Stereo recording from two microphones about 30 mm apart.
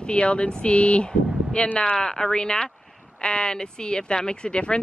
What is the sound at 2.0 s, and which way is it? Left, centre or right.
A woman's voice, left.